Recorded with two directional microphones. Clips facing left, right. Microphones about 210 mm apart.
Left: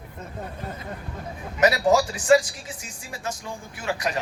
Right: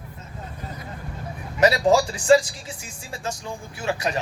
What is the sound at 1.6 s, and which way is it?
Speech, 30° right (ahead or behind).